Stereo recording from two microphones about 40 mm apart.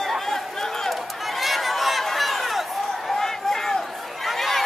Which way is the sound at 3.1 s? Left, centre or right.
Centre.